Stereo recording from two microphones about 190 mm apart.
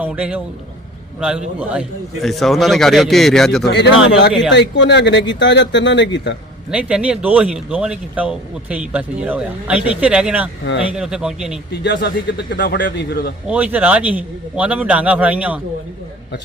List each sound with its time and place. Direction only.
0.0 s a man's voice: 5° right (ahead or behind)
1.5 s speech: 5° right (ahead or behind)
3.7 s speech: 65° left (ahead or behind)
6.7 s speech: 5° right (ahead or behind)
11.8 s speech: 60° left (ahead or behind)
13.5 s a man's voice: 10° right (ahead or behind)